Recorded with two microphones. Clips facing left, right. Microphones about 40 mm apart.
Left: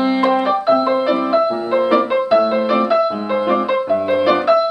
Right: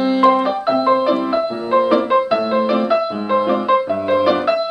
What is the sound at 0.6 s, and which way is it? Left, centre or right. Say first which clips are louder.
Music: right 1 dB; centre.